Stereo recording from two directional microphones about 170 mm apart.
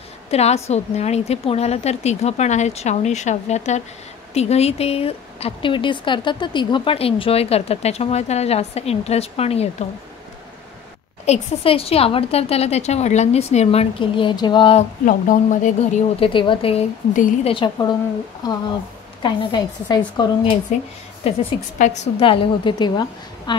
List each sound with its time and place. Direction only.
0.3 s a woman's voice: 40° left (ahead or behind)
11.2 s speech: 35° left (ahead or behind)
15.0 s speech: 50° left (ahead or behind)
16.2 s speech: 30° left (ahead or behind)
17.1 s speech: 45° left (ahead or behind)
17.5 s a woman's voice: 25° left (ahead or behind)
19.2 s a woman's voice: 25° left (ahead or behind)
20.7 s speech: 45° left (ahead or behind)
22.2 s a woman's voice: 30° left (ahead or behind)